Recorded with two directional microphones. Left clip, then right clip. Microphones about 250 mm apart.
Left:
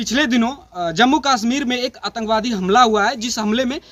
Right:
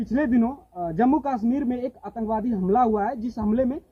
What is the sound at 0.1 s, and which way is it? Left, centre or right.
A man's voice, centre.